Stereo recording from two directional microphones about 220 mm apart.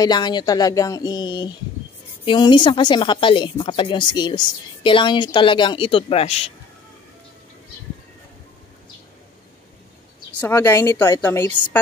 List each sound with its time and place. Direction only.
0.0 s a woman's voice: 20° left (ahead or behind)
10.3 s a woman's voice: 5° left (ahead or behind)